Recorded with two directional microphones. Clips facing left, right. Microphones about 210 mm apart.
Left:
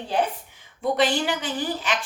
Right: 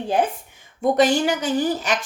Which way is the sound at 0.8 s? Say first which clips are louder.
Right 5 dB; 45° right (ahead or behind).